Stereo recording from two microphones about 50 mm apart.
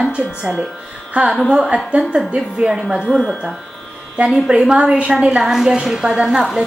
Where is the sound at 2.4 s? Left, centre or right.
Centre.